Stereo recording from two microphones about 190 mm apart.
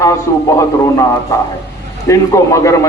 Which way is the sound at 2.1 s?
15° left (ahead or behind).